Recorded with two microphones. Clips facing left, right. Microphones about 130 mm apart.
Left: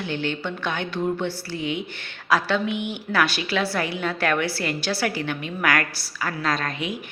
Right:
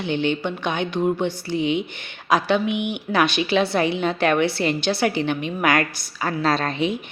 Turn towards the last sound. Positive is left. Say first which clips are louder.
# right 5 dB
turn(degrees=-25)  # may be behind; listen again after turning